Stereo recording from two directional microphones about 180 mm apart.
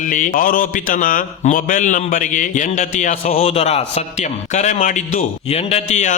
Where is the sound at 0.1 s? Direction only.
50° left (ahead or behind).